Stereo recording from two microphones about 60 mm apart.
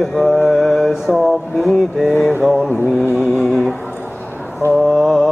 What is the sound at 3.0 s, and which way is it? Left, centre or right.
Music, left.